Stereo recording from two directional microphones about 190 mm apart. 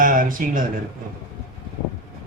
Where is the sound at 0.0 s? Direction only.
45° right (ahead or behind).